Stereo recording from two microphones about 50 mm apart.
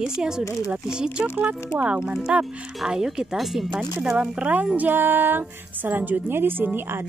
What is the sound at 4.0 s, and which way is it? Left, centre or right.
Speech, centre.